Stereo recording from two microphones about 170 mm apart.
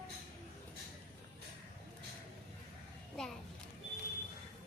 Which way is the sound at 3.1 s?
Centre (ahead or behind).